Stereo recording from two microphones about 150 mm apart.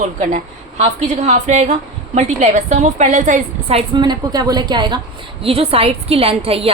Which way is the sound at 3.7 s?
30° right (ahead or behind).